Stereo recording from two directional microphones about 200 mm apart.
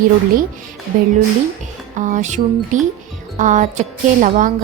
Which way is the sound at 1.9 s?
40° right (ahead or behind).